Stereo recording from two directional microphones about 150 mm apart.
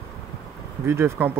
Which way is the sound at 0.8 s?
15° right (ahead or behind).